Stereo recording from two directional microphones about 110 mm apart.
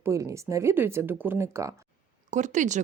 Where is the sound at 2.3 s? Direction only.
90° right.